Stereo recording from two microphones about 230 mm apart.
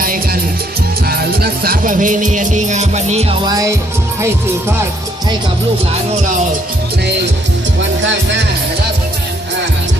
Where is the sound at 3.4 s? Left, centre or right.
Centre.